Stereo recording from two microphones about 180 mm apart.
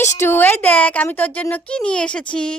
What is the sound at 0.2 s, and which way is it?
Speech, 10° left (ahead or behind).